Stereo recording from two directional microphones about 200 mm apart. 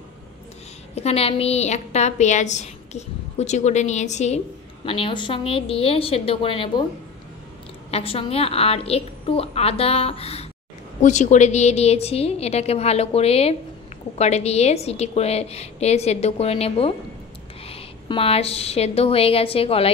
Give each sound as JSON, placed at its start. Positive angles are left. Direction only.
{"t": 0.9, "sound": "a woman's voice", "side_deg": 30}
{"t": 7.9, "sound": "a woman's voice", "side_deg": 30}